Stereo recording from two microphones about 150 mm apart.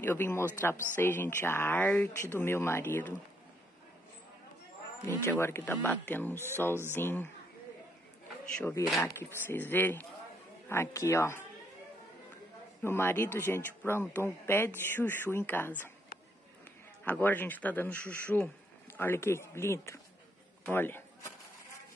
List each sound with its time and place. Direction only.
0.0 s speech: 15° left (ahead or behind)
5.0 s speech: 15° left (ahead or behind)
8.5 s speech: 15° left (ahead or behind)
12.8 s speech: 15° left (ahead or behind)
17.0 s speech: 10° left (ahead or behind)
20.6 s a sound: 15° left (ahead or behind)